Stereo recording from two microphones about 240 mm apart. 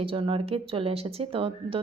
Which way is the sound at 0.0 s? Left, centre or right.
Right.